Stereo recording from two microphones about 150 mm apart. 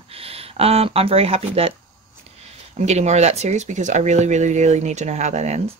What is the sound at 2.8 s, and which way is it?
Speech, 50° right (ahead or behind).